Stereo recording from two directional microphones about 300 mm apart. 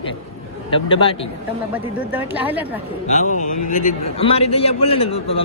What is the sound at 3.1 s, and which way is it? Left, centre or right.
A man's voice, left.